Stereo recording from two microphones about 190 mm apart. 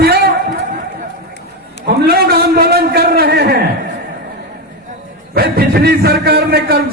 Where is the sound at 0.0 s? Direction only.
55° right (ahead or behind).